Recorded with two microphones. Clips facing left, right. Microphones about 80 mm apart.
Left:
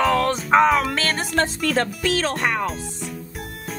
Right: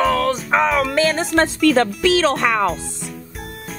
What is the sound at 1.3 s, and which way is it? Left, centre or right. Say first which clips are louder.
Speech: right 6 dB; right.